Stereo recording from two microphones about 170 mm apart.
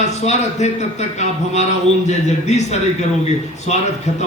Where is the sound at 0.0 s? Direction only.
40° left (ahead or behind).